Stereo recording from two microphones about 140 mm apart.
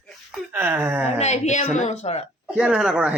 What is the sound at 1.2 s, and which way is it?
A woman's voice, 55° left (ahead or behind).